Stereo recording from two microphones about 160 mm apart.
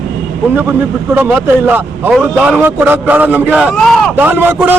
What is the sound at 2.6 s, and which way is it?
Speech, 10° right (ahead or behind).